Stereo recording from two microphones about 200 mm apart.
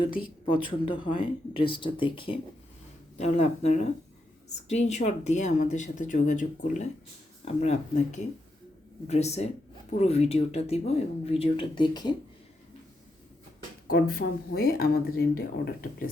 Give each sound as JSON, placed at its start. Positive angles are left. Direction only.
{"t": 0.4, "sound": "speech", "side_deg": 25}
{"t": 13.8, "sound": "speech", "side_deg": 50}